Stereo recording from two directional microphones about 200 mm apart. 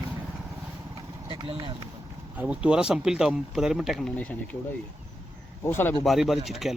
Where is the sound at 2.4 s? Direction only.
5° right (ahead or behind).